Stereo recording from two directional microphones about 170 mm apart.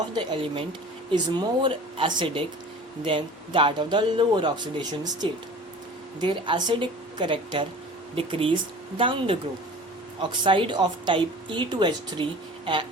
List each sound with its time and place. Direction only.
0.1 s speech: 25° right (ahead or behind)